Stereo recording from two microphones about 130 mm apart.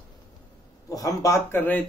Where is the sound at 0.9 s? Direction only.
25° left (ahead or behind).